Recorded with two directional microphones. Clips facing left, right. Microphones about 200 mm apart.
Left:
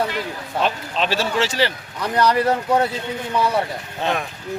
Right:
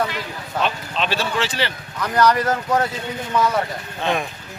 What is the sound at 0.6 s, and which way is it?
Speech, 40° left (ahead or behind).